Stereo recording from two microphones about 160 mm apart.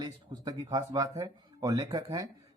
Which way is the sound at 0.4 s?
25° right (ahead or behind).